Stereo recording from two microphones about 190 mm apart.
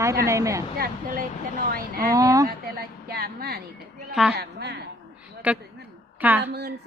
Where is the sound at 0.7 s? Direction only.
50° right (ahead or behind).